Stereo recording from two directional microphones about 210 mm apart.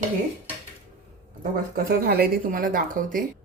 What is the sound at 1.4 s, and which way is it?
Speech, 45° right (ahead or behind).